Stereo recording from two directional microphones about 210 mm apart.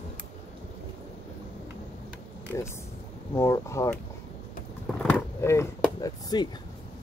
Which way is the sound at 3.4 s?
15° left (ahead or behind).